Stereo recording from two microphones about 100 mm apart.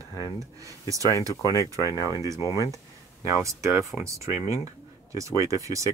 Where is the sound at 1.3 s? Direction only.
35° left (ahead or behind).